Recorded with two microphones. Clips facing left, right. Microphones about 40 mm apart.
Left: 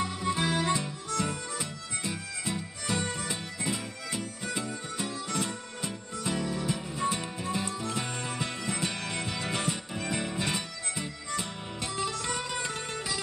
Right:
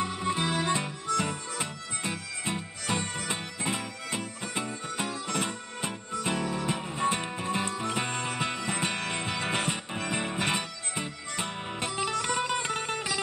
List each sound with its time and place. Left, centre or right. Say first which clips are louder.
0.0 s music: even; right